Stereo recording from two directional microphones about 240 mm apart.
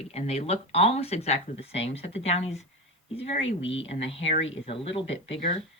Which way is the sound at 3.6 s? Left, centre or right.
Left.